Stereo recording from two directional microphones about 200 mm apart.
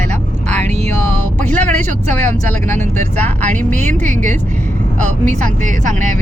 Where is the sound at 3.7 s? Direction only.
35° right (ahead or behind).